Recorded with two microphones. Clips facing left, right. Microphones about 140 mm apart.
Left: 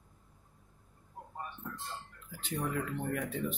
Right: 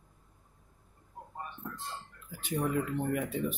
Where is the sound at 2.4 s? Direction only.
15° right (ahead or behind).